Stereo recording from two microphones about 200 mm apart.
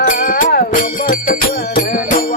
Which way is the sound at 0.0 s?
45° left (ahead or behind).